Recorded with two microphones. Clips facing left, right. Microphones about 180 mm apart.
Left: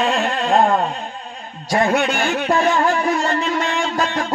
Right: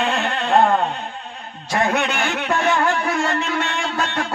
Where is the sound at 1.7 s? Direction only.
35° left (ahead or behind).